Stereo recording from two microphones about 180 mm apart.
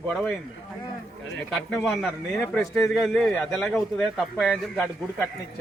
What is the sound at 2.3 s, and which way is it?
Speech, 15° left (ahead or behind).